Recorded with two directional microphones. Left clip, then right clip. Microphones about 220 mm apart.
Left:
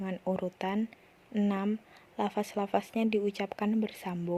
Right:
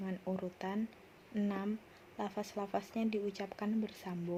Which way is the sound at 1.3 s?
40° left (ahead or behind).